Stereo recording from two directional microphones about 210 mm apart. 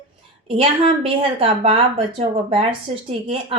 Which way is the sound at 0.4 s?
25° right (ahead or behind).